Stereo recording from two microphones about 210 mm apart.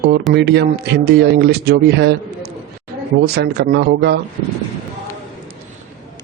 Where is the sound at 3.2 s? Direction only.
50° right (ahead or behind).